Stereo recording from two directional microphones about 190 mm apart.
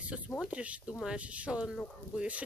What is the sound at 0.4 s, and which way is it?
Speech, 5° right (ahead or behind).